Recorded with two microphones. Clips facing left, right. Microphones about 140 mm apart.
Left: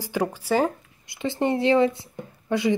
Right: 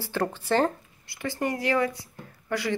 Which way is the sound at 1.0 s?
20° left (ahead or behind).